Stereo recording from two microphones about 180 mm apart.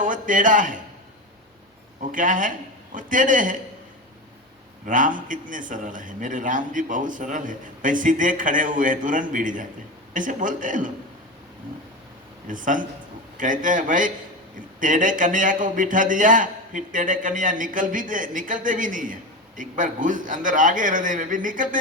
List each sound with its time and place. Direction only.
0.0 s a man's voice: 45° right (ahead or behind)
2.0 s a man's voice: 45° right (ahead or behind)
4.9 s a man's voice: 45° right (ahead or behind)
12.5 s a man's voice: 45° right (ahead or behind)